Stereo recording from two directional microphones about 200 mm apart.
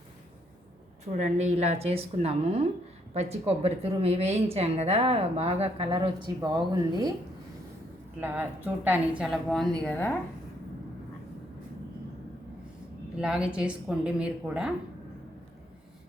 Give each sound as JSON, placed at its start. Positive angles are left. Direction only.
{"t": 1.0, "sound": "a woman's voice", "side_deg": -35}
{"t": 8.2, "sound": "a woman's voice", "side_deg": -10}
{"t": 13.1, "sound": "a woman's voice", "side_deg": -5}